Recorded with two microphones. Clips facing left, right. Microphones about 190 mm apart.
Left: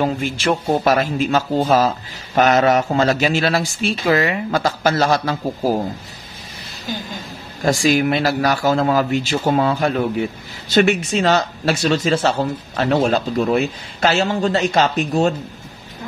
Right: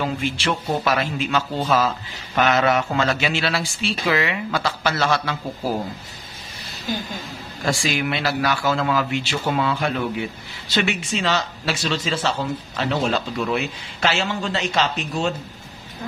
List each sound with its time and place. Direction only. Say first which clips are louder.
0.0 s a man's voice: left 4 dB; 45° left (ahead or behind)
7.6 s a man's voice: left 7 dB; 40° left (ahead or behind)